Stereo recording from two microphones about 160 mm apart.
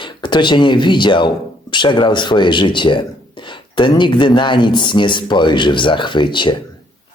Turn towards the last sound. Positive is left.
turn(degrees=30)  # may be behind; listen again after turning